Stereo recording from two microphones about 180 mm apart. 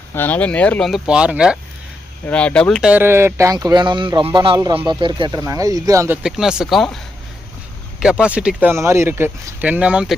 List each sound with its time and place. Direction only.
0.1 s speech: 10° left (ahead or behind); by 1.5 s 5° right (ahead or behind)
2.2 s speech: 5° left (ahead or behind)
2.9 s speech: 15° right (ahead or behind)
6.2 s speech: 5° right (ahead or behind)
8.0 s speech: 5° right (ahead or behind)